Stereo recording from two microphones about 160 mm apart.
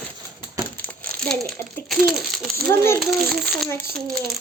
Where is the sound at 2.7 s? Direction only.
15° left (ahead or behind).